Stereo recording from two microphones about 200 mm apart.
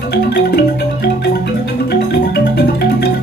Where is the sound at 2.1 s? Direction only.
55° left (ahead or behind).